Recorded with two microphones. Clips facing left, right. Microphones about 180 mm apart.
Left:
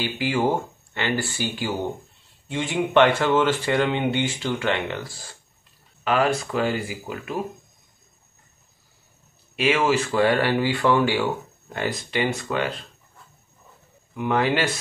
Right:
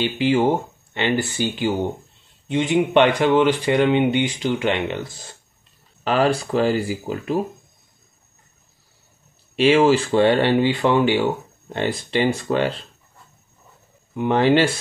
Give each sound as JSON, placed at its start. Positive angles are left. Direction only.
{"t": 0.0, "sound": "speech", "side_deg": -20}
{"t": 6.0, "sound": "speech", "side_deg": -30}
{"t": 9.6, "sound": "speech", "side_deg": -30}
{"t": 14.1, "sound": "speech", "side_deg": -30}